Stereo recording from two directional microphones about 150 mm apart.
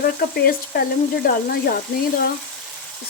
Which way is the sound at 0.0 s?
85° left.